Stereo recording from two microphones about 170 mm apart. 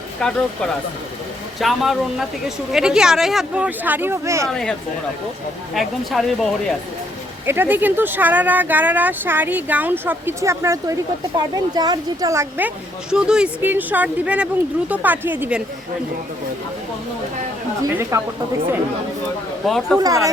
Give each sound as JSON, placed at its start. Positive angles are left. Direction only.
{"t": 0.2, "sound": "speech", "side_deg": 5}
{"t": 4.4, "sound": "speech", "side_deg": 5}
{"t": 5.7, "sound": "speech", "side_deg": 0}
{"t": 7.4, "sound": "speech", "side_deg": -10}
{"t": 17.9, "sound": "speech", "side_deg": -15}
{"t": 19.6, "sound": "speech", "side_deg": 0}
{"t": 20.0, "sound": "speech", "side_deg": -20}